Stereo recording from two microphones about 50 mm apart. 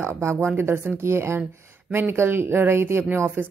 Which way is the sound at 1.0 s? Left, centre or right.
Right.